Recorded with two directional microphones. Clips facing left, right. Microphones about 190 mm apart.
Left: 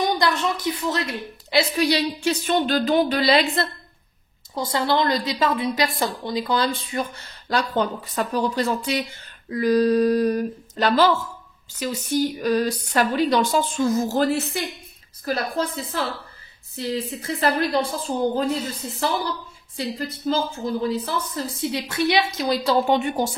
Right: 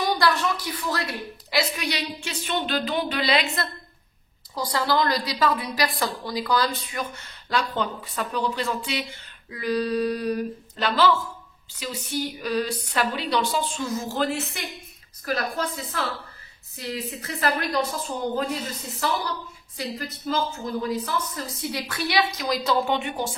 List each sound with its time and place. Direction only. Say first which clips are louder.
0.0 s a woman's voice: left 1 dB; 20° left (ahead or behind)
4.6 s a woman's voice: left 2 dB; 25° left (ahead or behind); by 23.3 s 40° left (ahead or behind)